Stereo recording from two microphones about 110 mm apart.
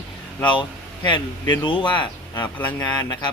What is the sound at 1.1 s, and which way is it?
A man's voice, 45° left (ahead or behind).